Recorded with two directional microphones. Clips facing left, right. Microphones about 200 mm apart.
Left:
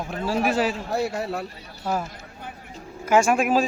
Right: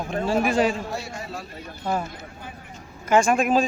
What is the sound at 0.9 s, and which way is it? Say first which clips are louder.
Speech: left 7 dB; 60° left (ahead or behind).